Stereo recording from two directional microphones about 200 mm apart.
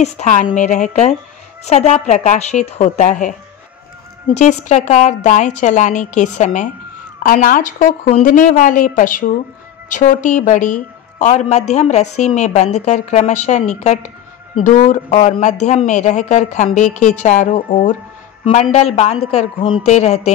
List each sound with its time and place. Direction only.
0.0 s a woman's voice: 35° left (ahead or behind)